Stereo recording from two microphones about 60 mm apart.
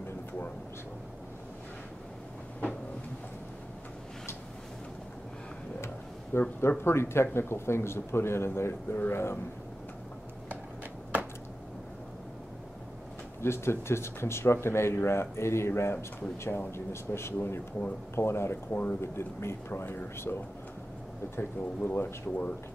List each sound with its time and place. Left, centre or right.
6.3 s speech: left
13.4 s speech: left
21.4 s speech: left